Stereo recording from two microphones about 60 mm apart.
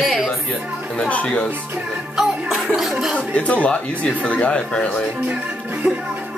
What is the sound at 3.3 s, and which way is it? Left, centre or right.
Speech, left.